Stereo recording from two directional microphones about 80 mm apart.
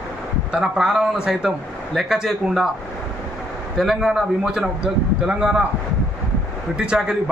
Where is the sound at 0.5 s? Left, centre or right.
Centre.